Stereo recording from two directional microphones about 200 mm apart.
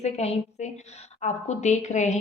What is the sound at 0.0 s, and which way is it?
A woman's voice, 35° left (ahead or behind).